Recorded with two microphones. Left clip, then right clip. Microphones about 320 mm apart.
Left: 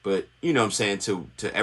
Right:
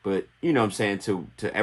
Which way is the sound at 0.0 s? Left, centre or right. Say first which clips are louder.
Left 1 dB; right.